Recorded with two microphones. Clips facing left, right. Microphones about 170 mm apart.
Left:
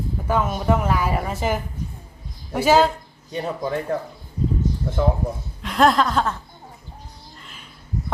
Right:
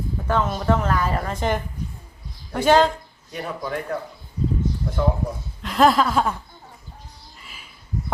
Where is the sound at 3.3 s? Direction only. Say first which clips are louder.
Left 3 dB; 30° left (ahead or behind).